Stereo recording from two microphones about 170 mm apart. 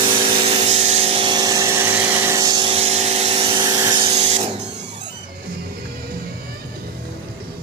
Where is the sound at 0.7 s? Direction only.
40° right (ahead or behind).